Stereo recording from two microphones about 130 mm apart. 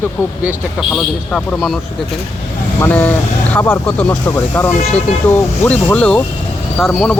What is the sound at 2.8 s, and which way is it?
Speech, 15° left (ahead or behind).